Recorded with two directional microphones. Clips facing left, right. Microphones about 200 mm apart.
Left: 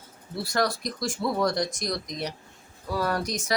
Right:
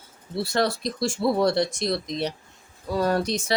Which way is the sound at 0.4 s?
25° right (ahead or behind).